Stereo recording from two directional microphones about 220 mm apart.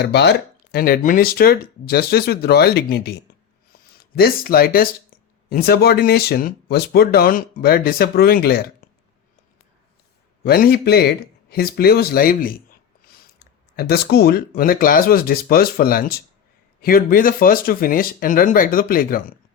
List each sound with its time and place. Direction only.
0.0 s speech: 50° left (ahead or behind)
8.8 s a sound: 40° left (ahead or behind)
10.4 s speech: 45° left (ahead or behind)